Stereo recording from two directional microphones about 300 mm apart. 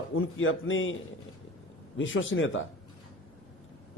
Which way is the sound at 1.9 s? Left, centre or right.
Left.